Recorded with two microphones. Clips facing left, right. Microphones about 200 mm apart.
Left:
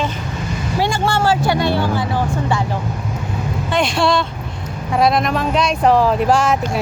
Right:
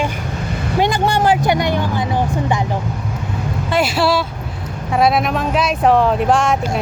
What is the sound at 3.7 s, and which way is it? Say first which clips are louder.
Speech: right 1 dB; 5° right (ahead or behind).